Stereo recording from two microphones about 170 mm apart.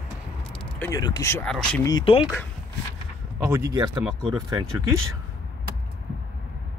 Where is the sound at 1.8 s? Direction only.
30° left (ahead or behind).